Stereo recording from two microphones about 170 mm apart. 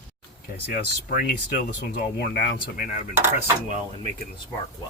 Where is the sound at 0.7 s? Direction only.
60° left (ahead or behind).